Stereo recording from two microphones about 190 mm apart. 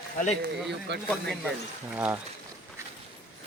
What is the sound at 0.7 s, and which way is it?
Speech, 65° right (ahead or behind).